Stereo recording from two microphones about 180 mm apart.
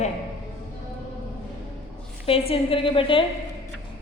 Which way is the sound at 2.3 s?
30° left (ahead or behind).